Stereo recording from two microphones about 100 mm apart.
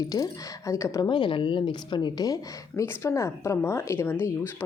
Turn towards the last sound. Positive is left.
turn(degrees=20)  # may be behind; listen again after turning